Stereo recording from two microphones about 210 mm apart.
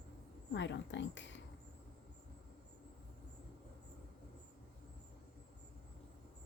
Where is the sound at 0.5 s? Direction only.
60° left (ahead or behind).